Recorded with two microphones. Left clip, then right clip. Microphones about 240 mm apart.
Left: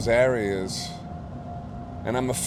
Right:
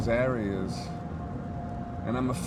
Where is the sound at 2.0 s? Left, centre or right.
Left.